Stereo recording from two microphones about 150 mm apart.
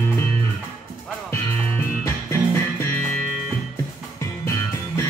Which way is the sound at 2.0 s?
20° left (ahead or behind).